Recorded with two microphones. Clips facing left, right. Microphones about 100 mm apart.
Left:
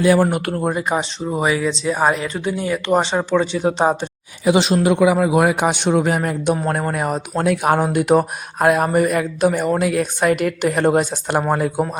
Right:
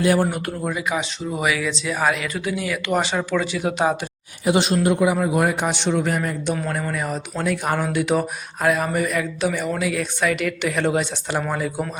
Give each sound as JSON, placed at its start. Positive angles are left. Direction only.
{"t": 0.2, "sound": "speech", "side_deg": 80}
{"t": 0.6, "sound": "speech", "side_deg": 45}
{"t": 4.6, "sound": "a man's voice", "side_deg": 90}